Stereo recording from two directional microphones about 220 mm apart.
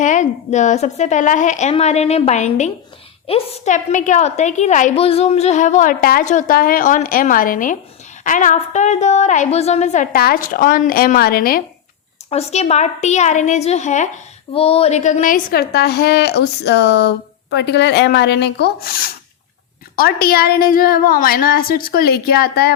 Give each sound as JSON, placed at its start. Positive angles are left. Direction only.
{"t": 0.0, "sound": "a woman's voice", "side_deg": 35}
{"t": 12.3, "sound": "a woman's voice", "side_deg": 30}